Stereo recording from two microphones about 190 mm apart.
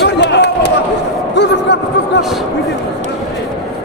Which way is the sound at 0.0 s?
65° left (ahead or behind).